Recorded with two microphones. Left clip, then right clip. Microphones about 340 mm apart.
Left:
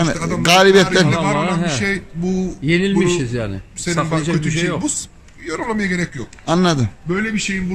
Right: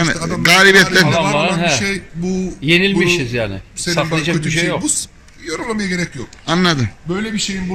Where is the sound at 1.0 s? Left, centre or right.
Right.